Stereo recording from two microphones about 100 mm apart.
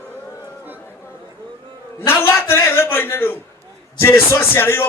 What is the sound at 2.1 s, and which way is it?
A man's voice, 20° left (ahead or behind).